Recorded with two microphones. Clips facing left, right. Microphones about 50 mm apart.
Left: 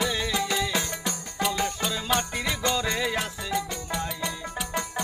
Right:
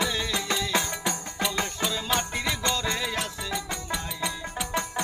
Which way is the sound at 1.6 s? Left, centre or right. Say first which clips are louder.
Left 1 dB; centre.